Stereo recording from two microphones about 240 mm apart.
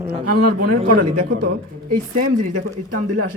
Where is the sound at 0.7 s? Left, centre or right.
Right.